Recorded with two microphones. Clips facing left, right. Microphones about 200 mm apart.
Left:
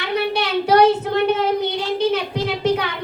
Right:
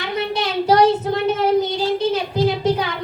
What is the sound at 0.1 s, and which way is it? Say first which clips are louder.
Child singing: left 2 dB; 65° left (ahead or behind).